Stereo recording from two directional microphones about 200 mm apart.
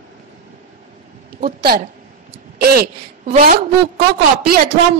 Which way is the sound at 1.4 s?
50° right (ahead or behind).